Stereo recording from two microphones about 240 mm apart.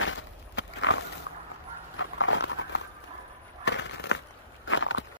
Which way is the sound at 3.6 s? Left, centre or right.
Left.